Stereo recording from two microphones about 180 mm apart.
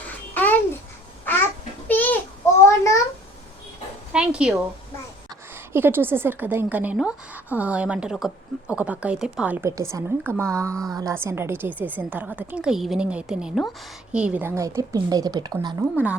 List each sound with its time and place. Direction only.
0.3 s babbling: 10° left (ahead or behind)
4.1 s a sound: 5° right (ahead or behind)
5.7 s a woman's voice: 10° right (ahead or behind)
15.8 s a woman's voice: 10° right (ahead or behind)